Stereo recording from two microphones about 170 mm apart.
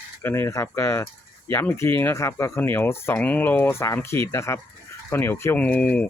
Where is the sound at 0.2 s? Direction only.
15° left (ahead or behind).